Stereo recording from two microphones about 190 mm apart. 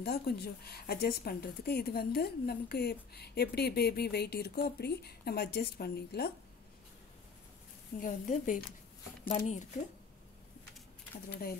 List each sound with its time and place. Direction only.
0.0 s speech: 55° left (ahead or behind)
8.0 s a woman's voice: 45° left (ahead or behind)